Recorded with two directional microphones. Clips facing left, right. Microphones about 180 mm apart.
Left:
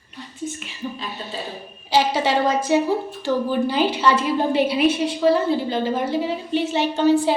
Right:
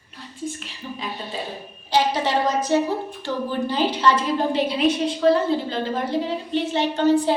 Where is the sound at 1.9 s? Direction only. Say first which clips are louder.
Left 2 dB; 10° left (ahead or behind).